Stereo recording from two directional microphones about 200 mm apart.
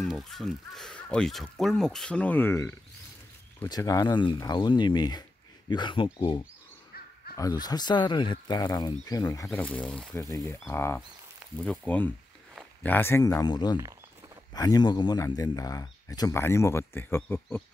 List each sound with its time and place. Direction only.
0.0 s speech: centre (ahead or behind)